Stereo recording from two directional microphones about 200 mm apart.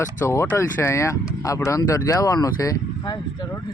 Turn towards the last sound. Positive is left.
turn(degrees=20)  # may be behind; listen again after turning